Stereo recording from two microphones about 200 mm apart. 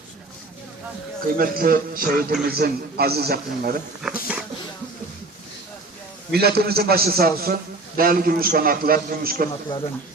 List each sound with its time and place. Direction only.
1.4 s a man's voice: 45° right (ahead or behind)
4.0 s speech: centre (ahead or behind)
6.3 s a man's voice: 50° right (ahead or behind)
9.5 s speech: 25° left (ahead or behind)